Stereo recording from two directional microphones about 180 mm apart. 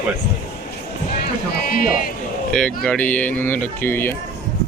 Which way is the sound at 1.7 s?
50° left (ahead or behind).